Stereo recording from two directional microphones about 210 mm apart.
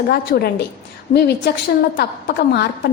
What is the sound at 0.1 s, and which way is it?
A woman's voice, 50° left (ahead or behind).